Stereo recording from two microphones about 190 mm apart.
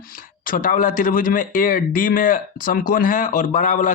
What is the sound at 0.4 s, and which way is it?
A man's voice, 45° left (ahead or behind).